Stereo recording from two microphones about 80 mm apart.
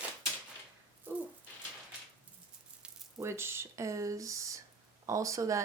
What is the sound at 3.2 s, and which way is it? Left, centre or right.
Speech, right.